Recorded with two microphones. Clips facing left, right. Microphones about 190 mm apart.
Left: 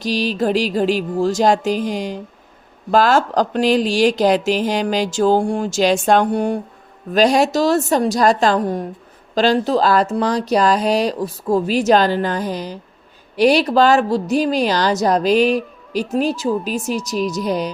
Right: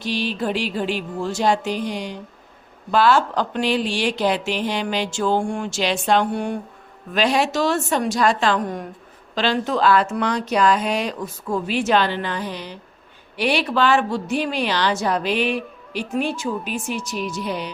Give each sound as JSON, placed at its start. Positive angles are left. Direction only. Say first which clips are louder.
{"t": 0.0, "sound": "a woman's voice", "louder": "left 5 dB", "side_deg": 40}